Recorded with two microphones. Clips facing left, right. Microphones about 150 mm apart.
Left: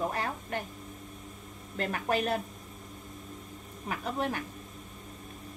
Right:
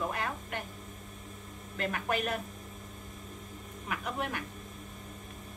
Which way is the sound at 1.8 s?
35° left (ahead or behind).